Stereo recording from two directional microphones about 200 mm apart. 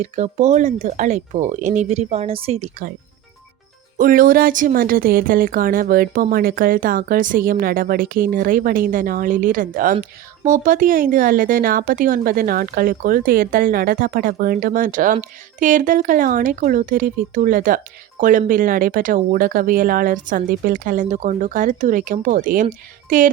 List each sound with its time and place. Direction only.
0.0 s speech: 35° right (ahead or behind)
3.9 s a woman's voice: 45° right (ahead or behind)